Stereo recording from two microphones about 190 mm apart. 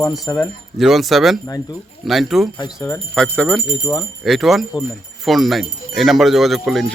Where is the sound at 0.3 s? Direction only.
15° left (ahead or behind).